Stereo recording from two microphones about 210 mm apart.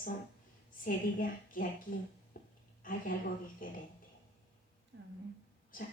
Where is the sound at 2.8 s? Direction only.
40° left (ahead or behind).